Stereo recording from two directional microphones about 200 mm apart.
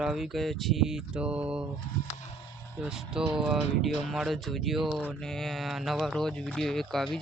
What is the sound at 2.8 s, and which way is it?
Speech, 5° right (ahead or behind).